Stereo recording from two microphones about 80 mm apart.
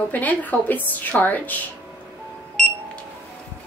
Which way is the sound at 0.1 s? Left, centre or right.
Centre.